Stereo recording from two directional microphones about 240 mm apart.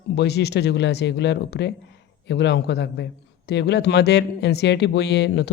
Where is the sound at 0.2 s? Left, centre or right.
Left.